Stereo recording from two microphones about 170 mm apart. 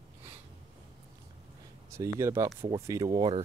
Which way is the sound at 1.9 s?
15° right (ahead or behind).